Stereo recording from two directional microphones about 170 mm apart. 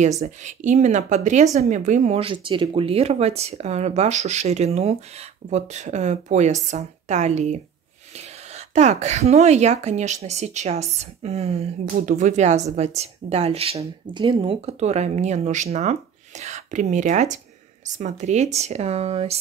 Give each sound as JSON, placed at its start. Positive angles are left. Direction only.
{"t": 0.2, "sound": "speech", "side_deg": -45}